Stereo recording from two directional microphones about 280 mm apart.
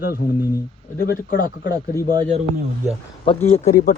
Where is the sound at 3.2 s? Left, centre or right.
Left.